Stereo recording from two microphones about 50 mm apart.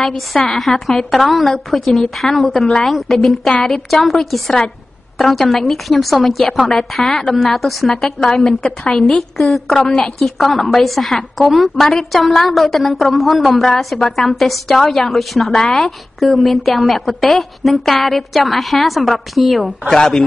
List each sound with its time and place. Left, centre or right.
0.0 s a woman's voice: centre
9.8 s a woman's voice: centre
10.1 s a woman's voice: centre